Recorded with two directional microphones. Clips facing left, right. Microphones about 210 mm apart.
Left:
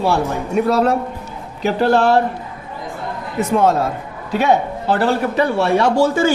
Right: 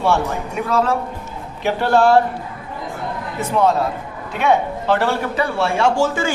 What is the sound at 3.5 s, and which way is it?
Speech, 45° left (ahead or behind).